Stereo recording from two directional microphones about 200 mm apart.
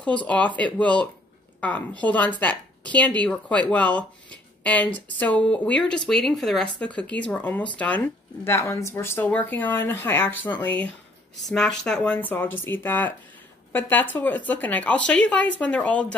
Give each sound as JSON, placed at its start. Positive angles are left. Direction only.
{"t": 0.6, "sound": "speech", "side_deg": 5}